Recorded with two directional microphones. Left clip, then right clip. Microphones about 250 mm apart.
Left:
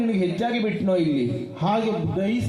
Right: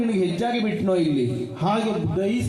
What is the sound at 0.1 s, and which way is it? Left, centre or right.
A man's voice, left.